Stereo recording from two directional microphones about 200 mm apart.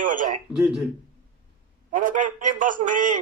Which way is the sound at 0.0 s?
40° right (ahead or behind).